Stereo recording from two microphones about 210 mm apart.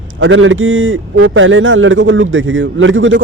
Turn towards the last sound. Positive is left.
turn(degrees=-65)  # may be behind; listen again after turning